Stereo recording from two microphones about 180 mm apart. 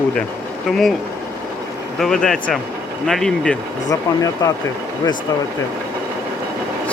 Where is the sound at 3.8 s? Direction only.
20° left (ahead or behind).